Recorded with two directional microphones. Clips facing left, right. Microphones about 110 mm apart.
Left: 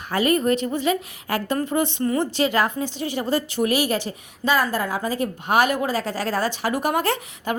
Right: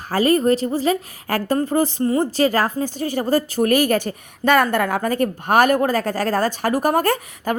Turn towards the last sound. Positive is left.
turn(degrees=-45)  # may be behind; listen again after turning